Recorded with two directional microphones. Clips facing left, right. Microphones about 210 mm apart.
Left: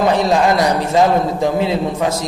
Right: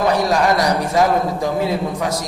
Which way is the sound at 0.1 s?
25° left (ahead or behind).